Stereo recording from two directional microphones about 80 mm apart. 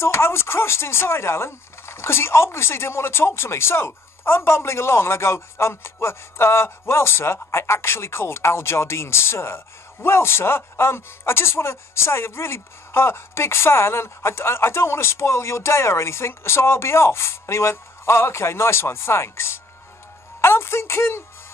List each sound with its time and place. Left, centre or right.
0.0 s speech: left